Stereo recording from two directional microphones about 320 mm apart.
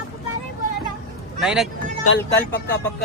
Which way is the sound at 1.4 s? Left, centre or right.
Centre.